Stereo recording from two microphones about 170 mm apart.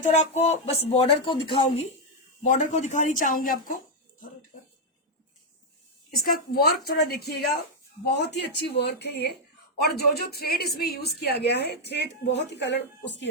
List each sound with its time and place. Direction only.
0.0 s speech: 40° left (ahead or behind)
2.4 s speech: 45° left (ahead or behind)
6.1 s speech: 60° left (ahead or behind)
8.0 s a woman's voice: 85° left